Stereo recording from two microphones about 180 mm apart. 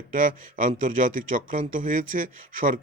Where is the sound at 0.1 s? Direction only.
45° right (ahead or behind).